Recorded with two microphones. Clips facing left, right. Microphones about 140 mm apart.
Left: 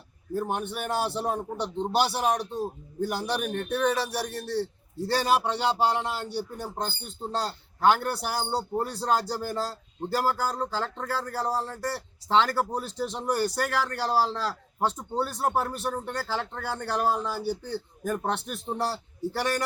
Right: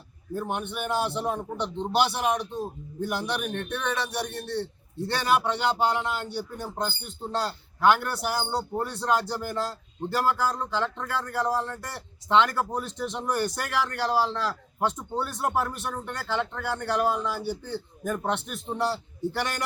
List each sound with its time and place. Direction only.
0.3 s a man's voice: 40° left (ahead or behind)
8.5 s a man's voice: 30° left (ahead or behind)